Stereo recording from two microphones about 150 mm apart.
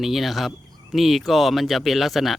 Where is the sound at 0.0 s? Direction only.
Centre (ahead or behind).